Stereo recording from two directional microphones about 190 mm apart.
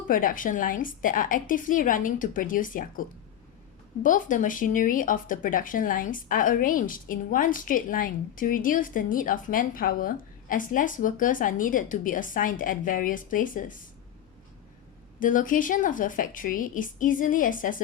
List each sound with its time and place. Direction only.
0.1 s speech: 45° left (ahead or behind)
4.0 s speech: 45° left (ahead or behind)
15.2 s speech: 45° left (ahead or behind)